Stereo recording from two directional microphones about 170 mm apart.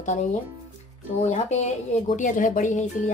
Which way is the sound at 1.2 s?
40° left (ahead or behind).